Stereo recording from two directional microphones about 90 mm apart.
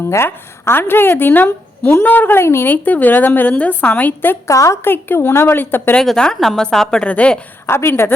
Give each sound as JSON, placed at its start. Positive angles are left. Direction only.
{"t": 0.1, "sound": "a woman's voice", "side_deg": 30}
{"t": 4.4, "sound": "a woman's voice", "side_deg": 35}
{"t": 6.0, "sound": "a woman's voice", "side_deg": 5}
{"t": 7.7, "sound": "a woman's voice", "side_deg": 25}